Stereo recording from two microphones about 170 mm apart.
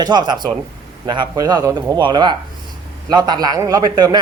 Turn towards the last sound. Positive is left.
turn(degrees=-20)  # may be behind; listen again after turning